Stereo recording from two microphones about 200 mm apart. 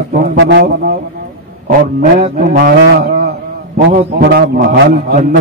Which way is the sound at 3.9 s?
40° right (ahead or behind).